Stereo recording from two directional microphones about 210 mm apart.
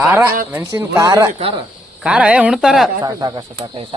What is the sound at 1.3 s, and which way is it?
Speech, 25° right (ahead or behind).